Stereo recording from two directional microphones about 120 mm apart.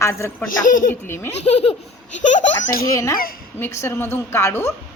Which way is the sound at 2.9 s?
25° left (ahead or behind).